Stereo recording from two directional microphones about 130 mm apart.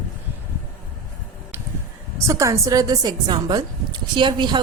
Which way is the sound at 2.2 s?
25° right (ahead or behind).